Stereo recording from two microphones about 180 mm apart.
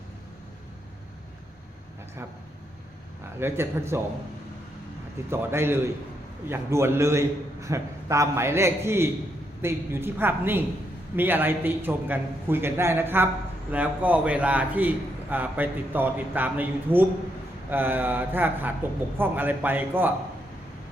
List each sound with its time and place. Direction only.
3.4 s a man's voice: 15° right (ahead or behind)
5.3 s a man's voice: 15° right (ahead or behind)